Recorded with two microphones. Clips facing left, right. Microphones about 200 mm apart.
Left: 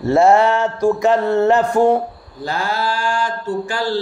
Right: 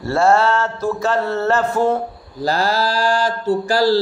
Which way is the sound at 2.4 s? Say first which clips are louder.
Right 3 dB; 35° right (ahead or behind).